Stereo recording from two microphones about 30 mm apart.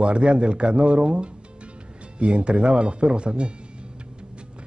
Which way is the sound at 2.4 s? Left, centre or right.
Right.